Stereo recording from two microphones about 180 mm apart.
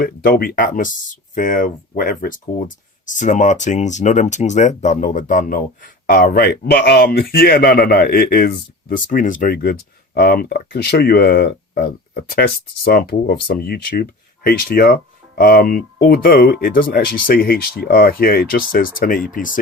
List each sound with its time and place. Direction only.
0.0 s speech: 55° left (ahead or behind)